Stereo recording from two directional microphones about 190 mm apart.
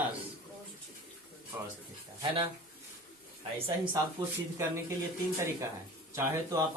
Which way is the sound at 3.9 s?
15° right (ahead or behind).